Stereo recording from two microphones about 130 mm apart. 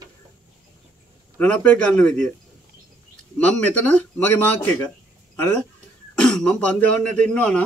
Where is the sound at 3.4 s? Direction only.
10° left (ahead or behind).